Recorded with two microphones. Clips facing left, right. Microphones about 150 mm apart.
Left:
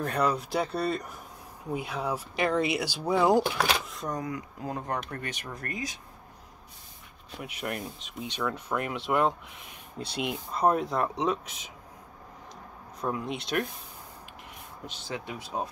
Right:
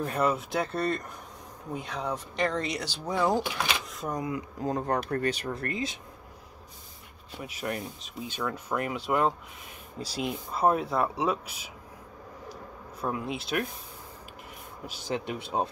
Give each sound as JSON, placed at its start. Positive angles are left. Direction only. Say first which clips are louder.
{"t": 0.0, "sound": "speech", "louder": "even", "side_deg": -5}
{"t": 3.9, "sound": "speech", "louder": "right 1 dB", "side_deg": -5}
{"t": 4.2, "sound": "speech", "louder": "right 3 dB", "side_deg": -30}
{"t": 7.3, "sound": "speech", "louder": "right 1 dB", "side_deg": 0}
{"t": 10.5, "sound": "speech", "louder": "even", "side_deg": -5}
{"t": 13.0, "sound": "speech", "louder": "even", "side_deg": -5}
{"t": 15.0, "sound": "speech", "louder": "right 5 dB", "side_deg": -20}